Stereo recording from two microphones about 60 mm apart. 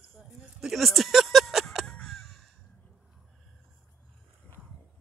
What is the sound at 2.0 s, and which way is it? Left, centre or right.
Caw, centre.